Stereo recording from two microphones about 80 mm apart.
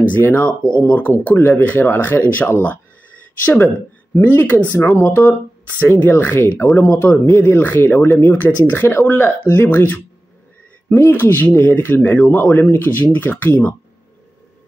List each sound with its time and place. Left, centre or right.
0.1 s speech: left
4.1 s speech: left
5.8 s speech: left
8.1 s speech: left
8.4 s speech: left
11.0 s speech: left